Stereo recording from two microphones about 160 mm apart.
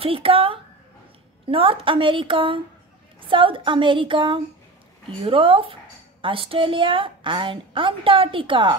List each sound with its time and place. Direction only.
0.0 s a woman's voice: 35° right (ahead or behind)